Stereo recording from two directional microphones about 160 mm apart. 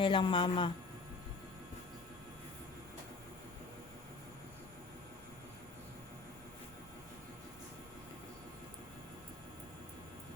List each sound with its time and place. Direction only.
0.0 s a woman's voice: 30° left (ahead or behind)